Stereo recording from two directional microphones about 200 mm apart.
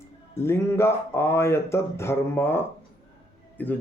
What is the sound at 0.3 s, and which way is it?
Speech, 10° left (ahead or behind).